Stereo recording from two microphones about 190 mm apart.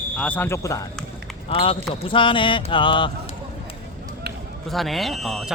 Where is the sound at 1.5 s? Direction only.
30° left (ahead or behind).